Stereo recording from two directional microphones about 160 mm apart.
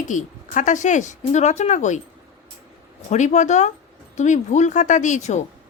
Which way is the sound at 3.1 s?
45° left (ahead or behind).